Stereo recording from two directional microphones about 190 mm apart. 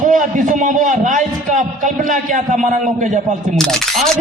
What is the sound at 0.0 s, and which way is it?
A man's voice, 45° right (ahead or behind).